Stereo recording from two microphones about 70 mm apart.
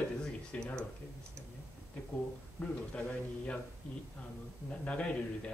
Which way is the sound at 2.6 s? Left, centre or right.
Left.